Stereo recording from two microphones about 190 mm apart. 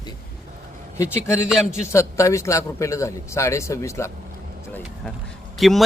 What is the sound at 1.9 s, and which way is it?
A man's voice, 15° left (ahead or behind).